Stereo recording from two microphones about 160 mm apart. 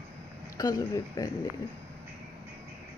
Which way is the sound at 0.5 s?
25° left (ahead or behind).